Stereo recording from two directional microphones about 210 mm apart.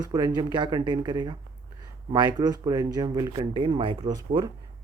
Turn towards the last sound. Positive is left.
turn(degrees=-20)  # may be behind; listen again after turning